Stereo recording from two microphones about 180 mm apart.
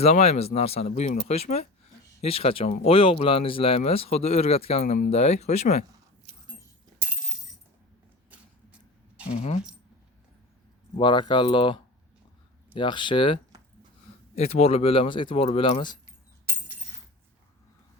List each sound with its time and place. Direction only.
0.0 s speech: 35° left (ahead or behind)
9.3 s speech: 30° left (ahead or behind)
10.9 s speech: 25° left (ahead or behind)